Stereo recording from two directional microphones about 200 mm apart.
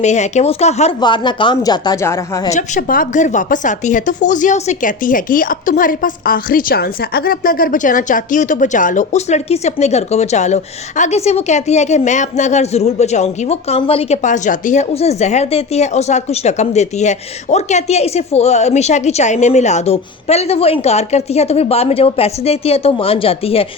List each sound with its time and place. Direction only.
0.0 s speech: 35° left (ahead or behind)
1.0 s a woman's voice: 25° left (ahead or behind)
2.5 s speech: 40° left (ahead or behind)